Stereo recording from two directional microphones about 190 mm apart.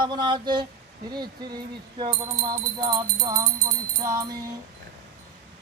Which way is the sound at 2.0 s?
25° right (ahead or behind).